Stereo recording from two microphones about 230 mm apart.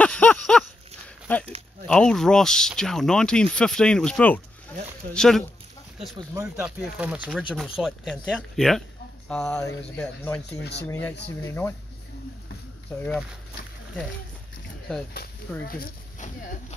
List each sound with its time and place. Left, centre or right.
0.0 s a sound: centre
1.9 s speech: centre
6.3 s speech: centre
10.6 s speech: left
10.9 s speech: centre
15.5 s speech: centre
15.8 s speech: left